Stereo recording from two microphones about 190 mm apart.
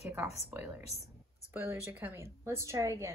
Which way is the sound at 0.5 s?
10° right (ahead or behind).